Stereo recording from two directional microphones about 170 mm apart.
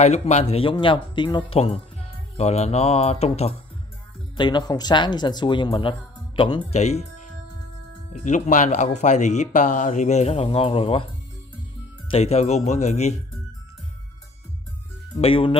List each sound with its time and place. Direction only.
0.0 s speech: 40° left (ahead or behind)
4.4 s speech: 25° left (ahead or behind)
8.1 s speech: 45° left (ahead or behind)
12.1 s speech: 35° left (ahead or behind)
15.1 s speech: 35° left (ahead or behind)